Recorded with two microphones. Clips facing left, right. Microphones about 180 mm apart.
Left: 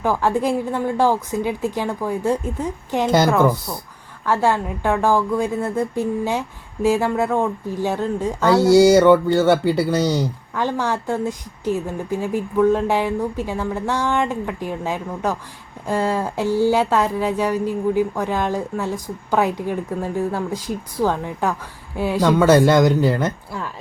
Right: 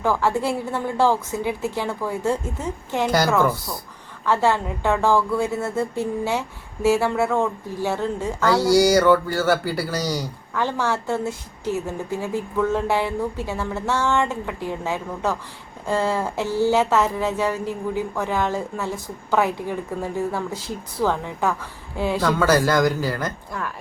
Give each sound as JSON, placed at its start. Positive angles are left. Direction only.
{"t": 0.0, "sound": "speech", "side_deg": 15}